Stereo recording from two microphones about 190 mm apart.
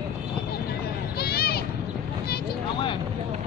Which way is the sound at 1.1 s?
55° left (ahead or behind).